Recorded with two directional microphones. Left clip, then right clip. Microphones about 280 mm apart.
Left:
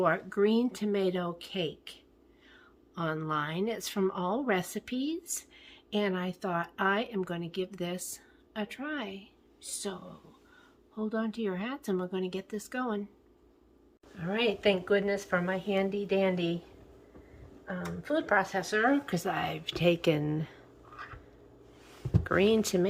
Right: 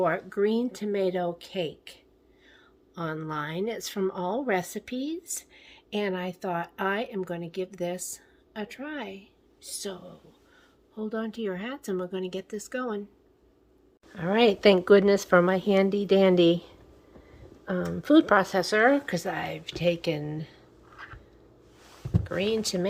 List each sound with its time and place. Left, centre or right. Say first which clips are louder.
0.0 s speech: right 2 dB; centre
14.2 s a woman's voice: right 8 dB; centre
17.7 s a woman's voice: right 9 dB; right; by 18.9 s centre
19.0 s speech: right 2 dB; centre
22.2 s speech: left 2 dB; centre